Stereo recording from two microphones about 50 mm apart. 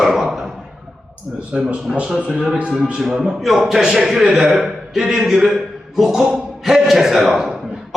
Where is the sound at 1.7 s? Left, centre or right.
Right.